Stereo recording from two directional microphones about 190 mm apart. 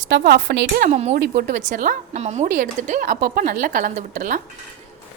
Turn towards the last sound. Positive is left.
turn(degrees=-45)  # may be behind; listen again after turning